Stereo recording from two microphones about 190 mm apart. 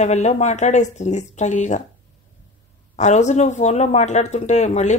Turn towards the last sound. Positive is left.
turn(degrees=40)  # may be behind; listen again after turning